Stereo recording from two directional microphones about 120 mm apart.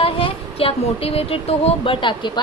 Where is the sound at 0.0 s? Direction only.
50° left (ahead or behind).